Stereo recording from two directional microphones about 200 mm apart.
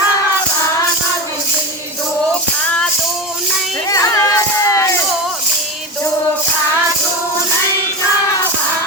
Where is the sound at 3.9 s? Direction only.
15° left (ahead or behind).